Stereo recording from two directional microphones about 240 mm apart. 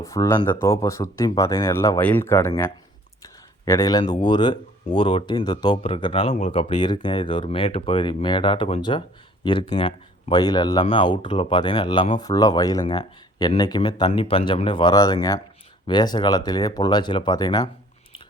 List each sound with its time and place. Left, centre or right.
0.0 s speech: centre